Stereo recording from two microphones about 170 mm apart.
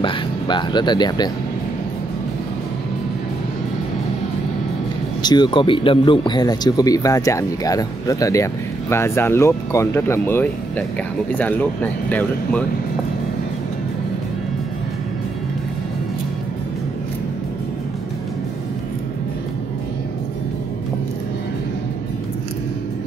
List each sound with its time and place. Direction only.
0.0 s speech: 25° left (ahead or behind)
5.2 s speech: 25° left (ahead or behind); by 12.6 s 10° left (ahead or behind)